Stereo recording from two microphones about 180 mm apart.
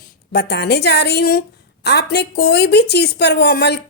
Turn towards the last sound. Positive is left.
turn(degrees=65)  # may be behind; listen again after turning